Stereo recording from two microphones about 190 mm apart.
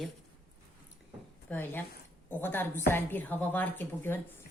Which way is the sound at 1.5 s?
10° left (ahead or behind).